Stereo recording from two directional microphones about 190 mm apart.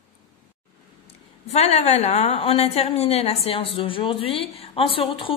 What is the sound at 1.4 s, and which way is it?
A woman's voice, 35° left (ahead or behind).